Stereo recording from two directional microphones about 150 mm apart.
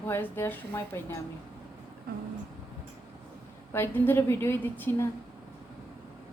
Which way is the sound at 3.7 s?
15° left (ahead or behind).